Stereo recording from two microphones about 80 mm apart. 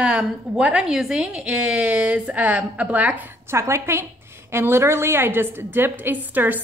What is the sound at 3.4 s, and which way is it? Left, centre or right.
A woman's voice, right.